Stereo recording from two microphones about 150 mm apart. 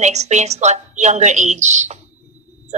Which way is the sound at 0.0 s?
50° right (ahead or behind).